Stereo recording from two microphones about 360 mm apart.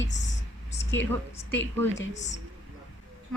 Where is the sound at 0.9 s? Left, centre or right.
Centre.